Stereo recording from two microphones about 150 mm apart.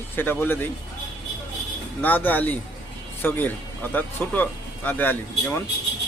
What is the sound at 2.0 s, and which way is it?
Speech, 10° left (ahead or behind).